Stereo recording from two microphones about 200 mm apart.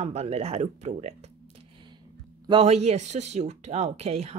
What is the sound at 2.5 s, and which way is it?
Speech, 30° right (ahead or behind).